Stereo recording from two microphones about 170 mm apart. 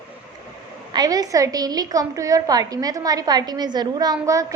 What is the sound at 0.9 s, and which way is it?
A woman's voice, 20° right (ahead or behind).